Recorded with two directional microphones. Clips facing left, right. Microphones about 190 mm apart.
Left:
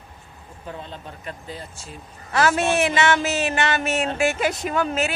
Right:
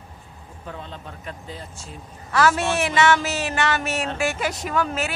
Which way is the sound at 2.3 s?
25° left (ahead or behind).